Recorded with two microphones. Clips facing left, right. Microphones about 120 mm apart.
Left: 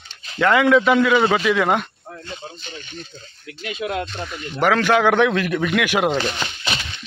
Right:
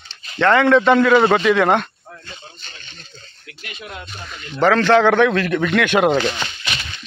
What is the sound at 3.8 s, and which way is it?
Speech, 90° left.